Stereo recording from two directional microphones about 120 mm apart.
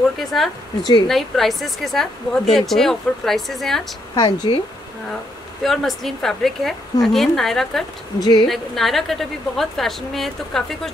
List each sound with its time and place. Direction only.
0.2 s speech: centre (ahead or behind)
4.1 s speech: 40° left (ahead or behind)
5.6 s speech: centre (ahead or behind)
8.2 s speech: 35° left (ahead or behind)
8.5 s speech: centre (ahead or behind)